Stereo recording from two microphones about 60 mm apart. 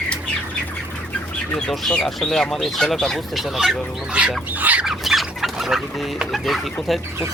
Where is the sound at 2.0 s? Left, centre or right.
Centre.